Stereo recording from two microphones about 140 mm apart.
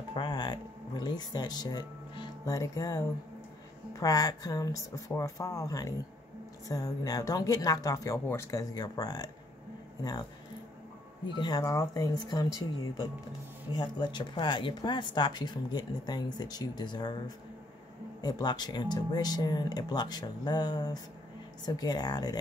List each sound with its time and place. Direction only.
0.1 s speech: 35° left (ahead or behind)
11.3 s speech: 30° left (ahead or behind)
13.7 s speech: 35° left (ahead or behind)
18.2 s speech: 30° left (ahead or behind)